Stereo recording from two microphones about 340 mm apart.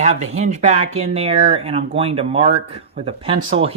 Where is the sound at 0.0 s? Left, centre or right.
Centre.